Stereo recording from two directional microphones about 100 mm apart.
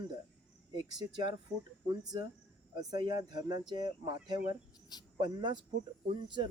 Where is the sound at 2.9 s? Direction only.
40° right (ahead or behind).